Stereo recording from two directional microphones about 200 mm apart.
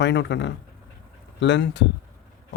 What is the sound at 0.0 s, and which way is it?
A man's voice, 60° left (ahead or behind).